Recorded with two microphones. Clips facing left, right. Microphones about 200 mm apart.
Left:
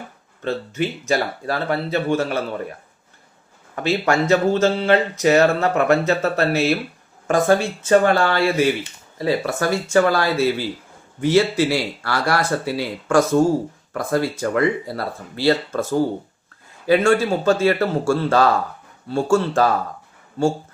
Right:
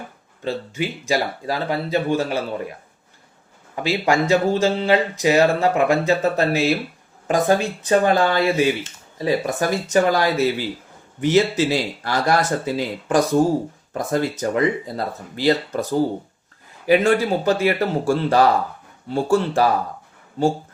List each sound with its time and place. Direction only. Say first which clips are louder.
0.4 s speech: left 2 dB; 10° right (ahead or behind)
3.8 s speech: even; 10° right (ahead or behind)